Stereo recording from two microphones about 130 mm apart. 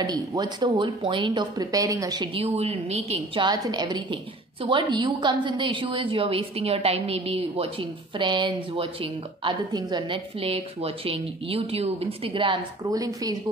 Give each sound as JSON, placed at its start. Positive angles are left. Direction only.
{"t": 0.0, "sound": "a woman's voice", "side_deg": -30}
{"t": 2.3, "sound": "a woman's voice", "side_deg": -50}
{"t": 3.4, "sound": "a woman's voice", "side_deg": -30}
{"t": 13.0, "sound": "speech", "side_deg": -30}